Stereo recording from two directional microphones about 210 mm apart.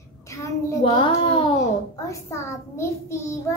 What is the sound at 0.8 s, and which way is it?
Speech, 25° left (ahead or behind).